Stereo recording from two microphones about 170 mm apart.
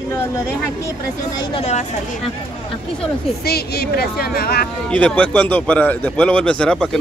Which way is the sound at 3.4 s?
65° left (ahead or behind).